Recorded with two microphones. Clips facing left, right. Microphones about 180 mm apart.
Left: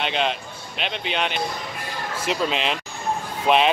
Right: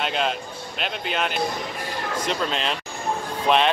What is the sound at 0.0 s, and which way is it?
Speech, centre (ahead or behind).